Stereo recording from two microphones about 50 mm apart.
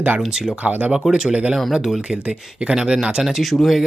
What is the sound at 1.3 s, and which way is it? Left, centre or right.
Speech, right.